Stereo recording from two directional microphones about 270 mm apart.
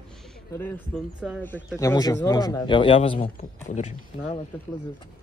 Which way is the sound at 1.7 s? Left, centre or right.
Centre.